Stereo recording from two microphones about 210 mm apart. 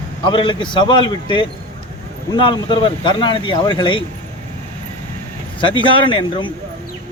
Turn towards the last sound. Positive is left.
turn(degrees=20)  # may be behind; listen again after turning